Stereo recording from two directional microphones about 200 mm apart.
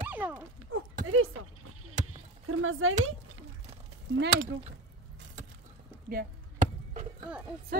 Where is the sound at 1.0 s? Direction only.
90° right.